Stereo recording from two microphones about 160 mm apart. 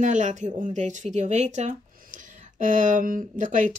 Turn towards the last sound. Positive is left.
turn(degrees=-55)  # may be behind; listen again after turning